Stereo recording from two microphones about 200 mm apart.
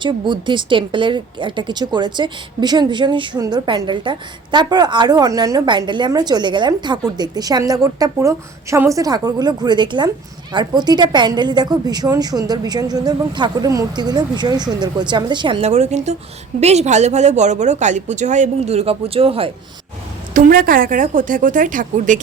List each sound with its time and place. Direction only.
0.0 s a woman's voice: 25° right (ahead or behind)
20.3 s speech: 45° right (ahead or behind)